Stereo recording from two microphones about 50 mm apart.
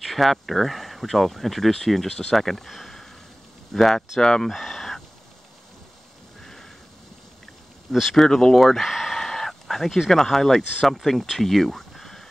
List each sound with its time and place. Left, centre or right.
0.0 s speech: centre
7.9 s speech: centre
9.2 s a sound: centre
10.1 s speech: centre